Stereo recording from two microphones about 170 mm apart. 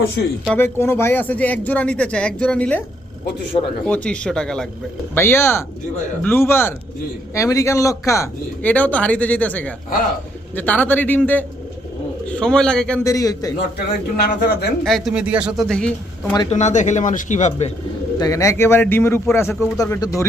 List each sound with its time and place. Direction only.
0.2 s speech: 75° left (ahead or behind)
0.5 s a man's voice: 15° left (ahead or behind)
3.8 s speech: 5° left (ahead or behind)
5.1 s a man's voice: 15° left (ahead or behind)
13.1 s speech: 20° left (ahead or behind)
13.7 s speech: 70° left (ahead or behind)
14.8 s speech: centre (ahead or behind)
16.5 s speech: 45° left (ahead or behind)
18.2 s a man's voice: 20° left (ahead or behind)